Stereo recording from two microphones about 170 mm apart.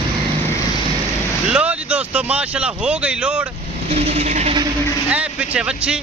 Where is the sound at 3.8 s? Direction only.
35° right (ahead or behind).